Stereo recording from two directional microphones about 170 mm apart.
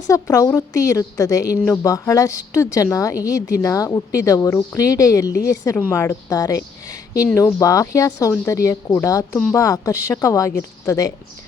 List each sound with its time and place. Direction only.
0.1 s speech: 20° left (ahead or behind)
6.8 s a sound: 20° left (ahead or behind)
7.3 s speech: 20° left (ahead or behind)